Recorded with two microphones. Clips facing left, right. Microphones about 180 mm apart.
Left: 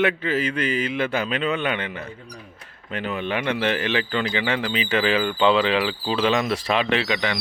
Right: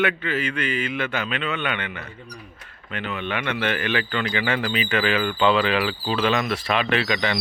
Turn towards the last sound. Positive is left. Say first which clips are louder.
# left 1 dB
turn(degrees=20)  # may be behind; listen again after turning